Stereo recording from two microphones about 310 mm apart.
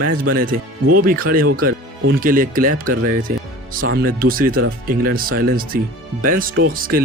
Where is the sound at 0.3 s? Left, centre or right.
Right.